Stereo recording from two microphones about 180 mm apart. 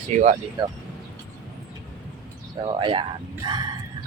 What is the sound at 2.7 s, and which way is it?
Speech, 25° right (ahead or behind).